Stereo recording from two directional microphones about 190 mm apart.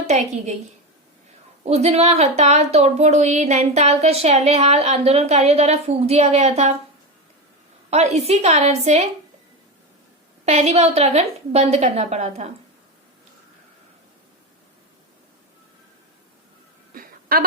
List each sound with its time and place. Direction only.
0.1 s speech: 40° right (ahead or behind)
1.6 s speech: 35° right (ahead or behind)
7.9 s speech: 35° right (ahead or behind)
10.4 s speech: 35° right (ahead or behind)
16.9 s a sound: 50° right (ahead or behind)